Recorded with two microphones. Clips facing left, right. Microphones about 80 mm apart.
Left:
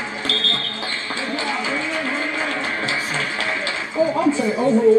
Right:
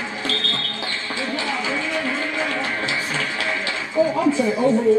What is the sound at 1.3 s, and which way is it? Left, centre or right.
Music, centre.